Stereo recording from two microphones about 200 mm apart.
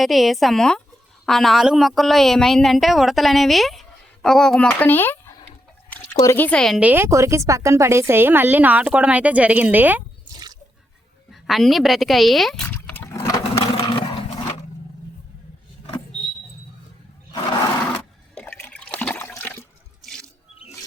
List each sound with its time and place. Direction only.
0.0 s a woman's voice: centre (ahead or behind)
10.3 s drip: 20° right (ahead or behind)
11.3 s a sound: centre (ahead or behind); by 14.6 s 25° left (ahead or behind)
17.9 s toilet flush: 10° left (ahead or behind)
20.1 s water: centre (ahead or behind)